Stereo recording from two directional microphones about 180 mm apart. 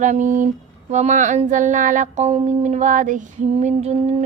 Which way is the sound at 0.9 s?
40° right (ahead or behind).